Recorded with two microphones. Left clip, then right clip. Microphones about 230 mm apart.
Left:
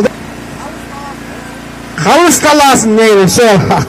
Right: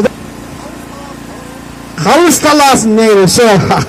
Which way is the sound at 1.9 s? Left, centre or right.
Centre.